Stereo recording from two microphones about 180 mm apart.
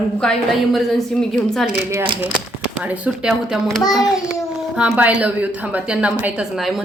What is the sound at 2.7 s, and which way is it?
Speech, 10° right (ahead or behind).